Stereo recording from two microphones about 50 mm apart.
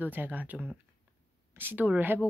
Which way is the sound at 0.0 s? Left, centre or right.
Right.